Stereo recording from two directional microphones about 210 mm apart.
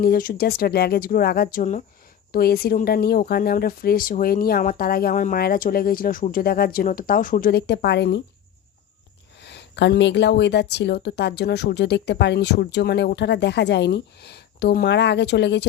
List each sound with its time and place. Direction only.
0.0 s a woman's voice: 45° left (ahead or behind)
9.4 s a woman's voice: 55° left (ahead or behind)